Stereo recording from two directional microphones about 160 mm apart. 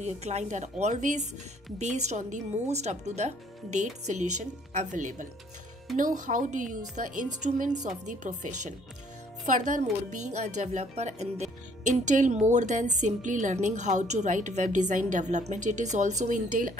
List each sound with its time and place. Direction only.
0.0 s a woman's voice: 45° right (ahead or behind)